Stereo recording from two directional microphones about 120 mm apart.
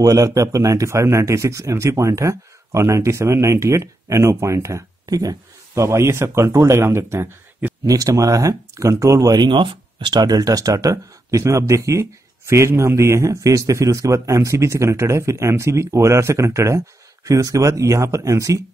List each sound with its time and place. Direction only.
0.0 s speech: 30° right (ahead or behind)